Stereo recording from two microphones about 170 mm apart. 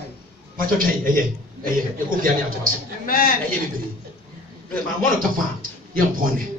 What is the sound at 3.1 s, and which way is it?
Speech, 55° left (ahead or behind).